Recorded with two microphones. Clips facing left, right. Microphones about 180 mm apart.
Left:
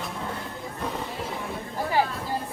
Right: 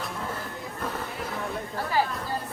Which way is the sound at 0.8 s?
Centre (ahead or behind).